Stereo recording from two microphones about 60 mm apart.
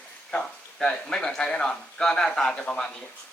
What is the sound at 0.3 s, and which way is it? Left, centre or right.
A man's voice, centre.